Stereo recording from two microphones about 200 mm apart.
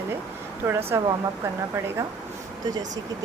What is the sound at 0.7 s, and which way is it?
Speech, 10° right (ahead or behind).